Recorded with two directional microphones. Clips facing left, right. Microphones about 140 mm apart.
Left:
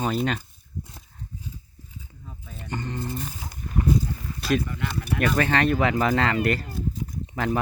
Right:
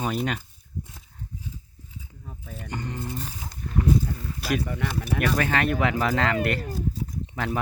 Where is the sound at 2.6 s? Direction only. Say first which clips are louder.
Left 2 dB; 10° right (ahead or behind).